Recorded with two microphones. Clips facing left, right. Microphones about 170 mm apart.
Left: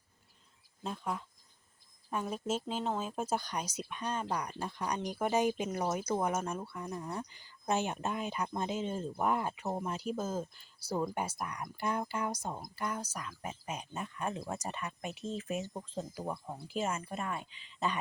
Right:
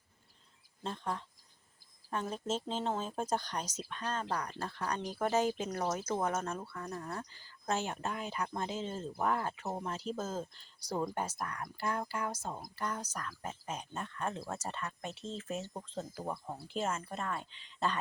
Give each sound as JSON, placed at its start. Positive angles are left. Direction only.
{"t": 0.8, "sound": "speech", "side_deg": 5}
{"t": 16.2, "sound": "speech", "side_deg": -5}